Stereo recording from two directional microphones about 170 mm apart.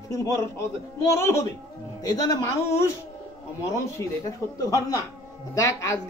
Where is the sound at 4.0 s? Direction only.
15° left (ahead or behind).